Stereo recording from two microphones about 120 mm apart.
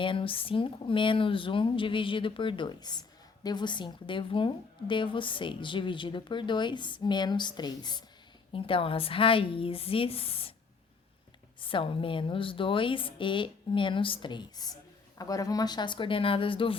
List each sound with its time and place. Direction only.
0.0 s speech: 45° left (ahead or behind)
8.5 s speech: 50° left (ahead or behind)
11.6 s speech: 45° left (ahead or behind)